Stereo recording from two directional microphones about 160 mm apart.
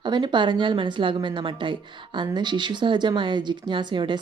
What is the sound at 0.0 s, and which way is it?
A woman's voice, 30° right (ahead or behind).